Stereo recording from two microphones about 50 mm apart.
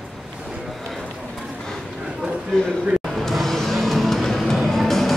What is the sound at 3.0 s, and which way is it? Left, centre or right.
Music, centre.